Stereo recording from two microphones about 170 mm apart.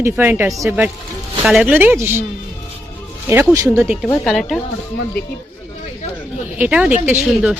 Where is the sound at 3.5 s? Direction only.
15° right (ahead or behind).